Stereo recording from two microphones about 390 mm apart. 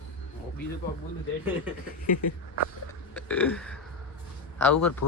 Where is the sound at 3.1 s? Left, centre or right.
Centre.